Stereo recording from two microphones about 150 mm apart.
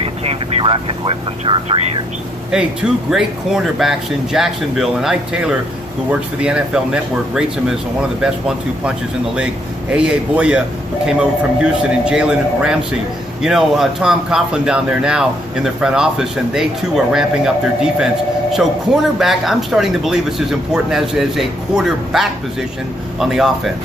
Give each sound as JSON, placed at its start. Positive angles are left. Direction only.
{"t": 0.0, "sound": "speech", "side_deg": -40}
{"t": 2.5, "sound": "speech", "side_deg": -5}
{"t": 9.9, "sound": "a man's voice", "side_deg": -10}
{"t": 18.5, "sound": "speech", "side_deg": 0}